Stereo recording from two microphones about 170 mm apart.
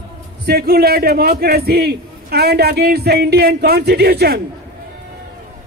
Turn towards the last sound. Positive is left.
turn(degrees=-70)  # may be behind; listen again after turning